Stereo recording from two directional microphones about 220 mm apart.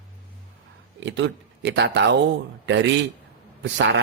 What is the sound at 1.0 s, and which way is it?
A man's voice, 55° right (ahead or behind).